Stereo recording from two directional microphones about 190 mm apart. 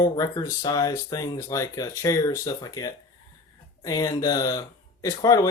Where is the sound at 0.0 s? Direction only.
20° left (ahead or behind).